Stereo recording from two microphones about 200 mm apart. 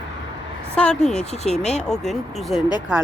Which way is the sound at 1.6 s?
35° left (ahead or behind).